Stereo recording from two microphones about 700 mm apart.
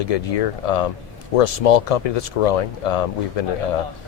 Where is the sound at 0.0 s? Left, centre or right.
Left.